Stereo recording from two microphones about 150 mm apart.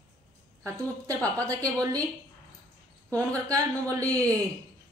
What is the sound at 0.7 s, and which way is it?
Speech, 20° right (ahead or behind).